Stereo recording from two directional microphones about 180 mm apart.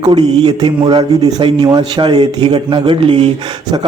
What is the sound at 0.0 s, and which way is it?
A man's voice, 25° right (ahead or behind).